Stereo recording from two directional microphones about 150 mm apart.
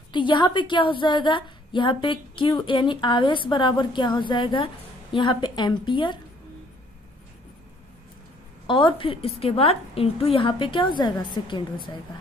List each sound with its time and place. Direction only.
0.1 s a woman's voice: 30° left (ahead or behind)
8.6 s a woman's voice: 35° left (ahead or behind)